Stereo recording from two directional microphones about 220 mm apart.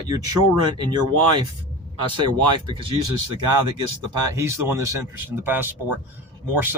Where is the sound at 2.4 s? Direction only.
20° right (ahead or behind).